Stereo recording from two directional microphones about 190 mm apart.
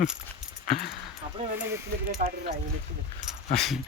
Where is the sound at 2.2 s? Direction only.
45° right (ahead or behind).